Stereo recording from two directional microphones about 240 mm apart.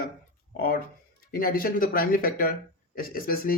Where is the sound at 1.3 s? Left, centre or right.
Left.